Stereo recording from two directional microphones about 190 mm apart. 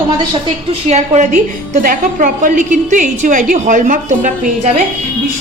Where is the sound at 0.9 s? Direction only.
35° right (ahead or behind).